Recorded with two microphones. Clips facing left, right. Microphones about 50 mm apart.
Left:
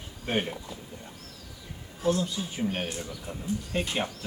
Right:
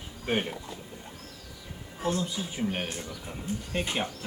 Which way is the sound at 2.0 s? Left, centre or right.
Right.